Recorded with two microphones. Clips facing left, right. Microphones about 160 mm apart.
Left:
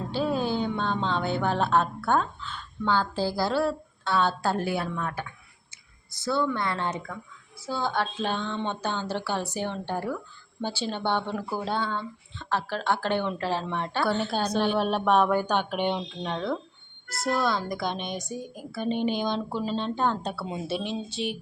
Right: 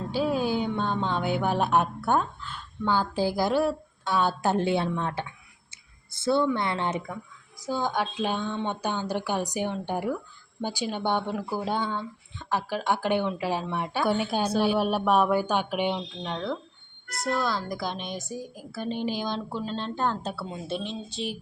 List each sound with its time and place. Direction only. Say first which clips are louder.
0.1 s speech: right 1 dB; 10° right (ahead or behind); by 5.2 s 25° right (ahead or behind)
6.2 s a woman's voice: right 3 dB; 20° right (ahead or behind); by 21.3 s centre (ahead or behind)